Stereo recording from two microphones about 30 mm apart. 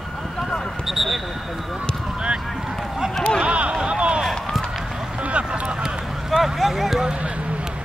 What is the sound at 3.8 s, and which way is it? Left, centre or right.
Run, right.